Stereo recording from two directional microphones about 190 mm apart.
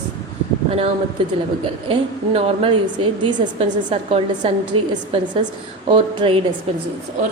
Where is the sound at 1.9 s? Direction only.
30° right (ahead or behind).